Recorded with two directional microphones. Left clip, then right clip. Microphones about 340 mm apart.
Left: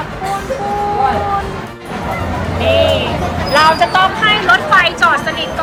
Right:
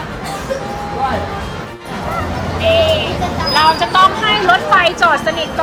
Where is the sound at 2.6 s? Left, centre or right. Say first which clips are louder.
Even; centre.